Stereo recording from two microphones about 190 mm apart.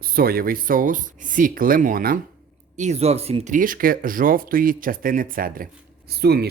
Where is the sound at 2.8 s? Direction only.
35° right (ahead or behind); by 6.4 s 55° right (ahead or behind).